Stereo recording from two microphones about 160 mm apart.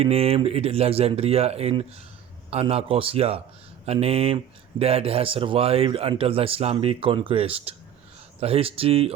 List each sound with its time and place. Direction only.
0.0 s speech: 40° right (ahead or behind)